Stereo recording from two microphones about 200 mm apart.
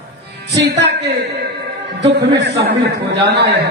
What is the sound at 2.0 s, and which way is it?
A man's voice, 60° right (ahead or behind).